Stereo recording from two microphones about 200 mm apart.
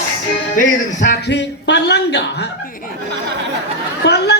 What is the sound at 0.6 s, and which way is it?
Music, 40° left (ahead or behind).